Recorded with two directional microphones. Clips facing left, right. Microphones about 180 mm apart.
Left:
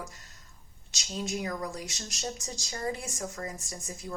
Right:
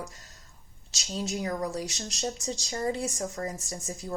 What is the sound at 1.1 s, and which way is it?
Speech, 30° right (ahead or behind).